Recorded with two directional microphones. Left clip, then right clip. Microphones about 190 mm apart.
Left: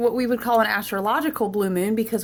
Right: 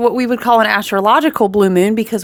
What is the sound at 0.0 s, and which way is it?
Speech, 55° right (ahead or behind).